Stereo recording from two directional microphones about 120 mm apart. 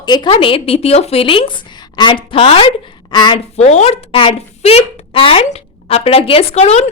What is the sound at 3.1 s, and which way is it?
Speech, 35° left (ahead or behind).